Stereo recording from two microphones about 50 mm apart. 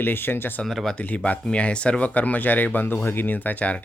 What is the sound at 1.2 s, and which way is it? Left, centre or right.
Speech, left.